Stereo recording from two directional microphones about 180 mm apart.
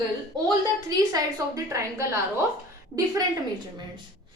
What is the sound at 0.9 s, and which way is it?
A woman's voice, 20° right (ahead or behind).